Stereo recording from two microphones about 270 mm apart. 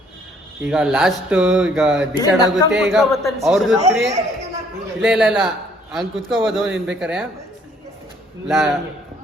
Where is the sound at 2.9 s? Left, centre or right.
Centre.